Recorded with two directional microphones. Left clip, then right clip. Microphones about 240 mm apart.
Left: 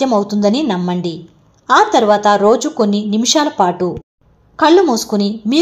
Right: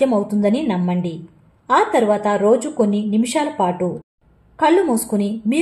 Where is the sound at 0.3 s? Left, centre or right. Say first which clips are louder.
Left 4 dB; centre.